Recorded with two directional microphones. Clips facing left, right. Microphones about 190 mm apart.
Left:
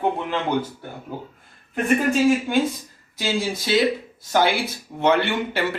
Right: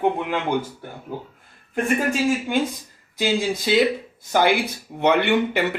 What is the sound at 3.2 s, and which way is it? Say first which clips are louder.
Speech: right 3 dB; 15° right (ahead or behind).